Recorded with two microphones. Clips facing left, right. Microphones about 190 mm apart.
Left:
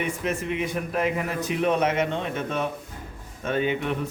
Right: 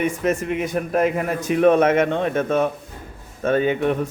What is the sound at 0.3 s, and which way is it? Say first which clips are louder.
A man's voice: right 5 dB; 45° right (ahead or behind).